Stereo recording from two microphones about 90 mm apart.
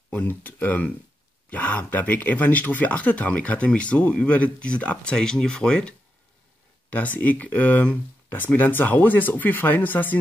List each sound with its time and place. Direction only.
0.1 s speech: 15° left (ahead or behind)